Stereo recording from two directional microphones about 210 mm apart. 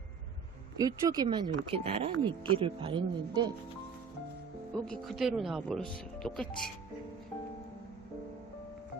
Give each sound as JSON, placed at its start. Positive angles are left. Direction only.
{"t": 0.8, "sound": "speech", "side_deg": -20}
{"t": 4.9, "sound": "speech", "side_deg": 0}